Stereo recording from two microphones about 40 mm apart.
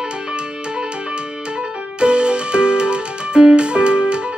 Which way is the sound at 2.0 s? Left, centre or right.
Right.